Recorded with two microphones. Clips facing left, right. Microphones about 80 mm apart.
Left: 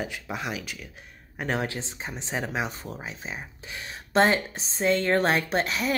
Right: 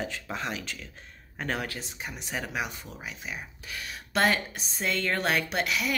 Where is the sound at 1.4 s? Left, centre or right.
Left.